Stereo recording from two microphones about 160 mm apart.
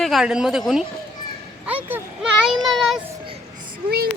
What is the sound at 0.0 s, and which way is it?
Speech, centre (ahead or behind).